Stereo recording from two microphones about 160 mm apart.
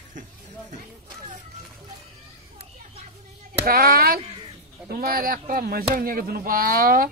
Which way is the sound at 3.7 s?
70° right (ahead or behind).